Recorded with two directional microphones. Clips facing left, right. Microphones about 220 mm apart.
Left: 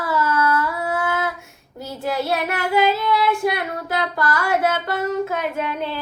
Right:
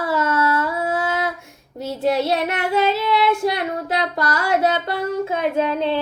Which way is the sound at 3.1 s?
25° right (ahead or behind).